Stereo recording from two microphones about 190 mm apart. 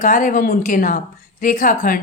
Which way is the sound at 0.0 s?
40° left (ahead or behind).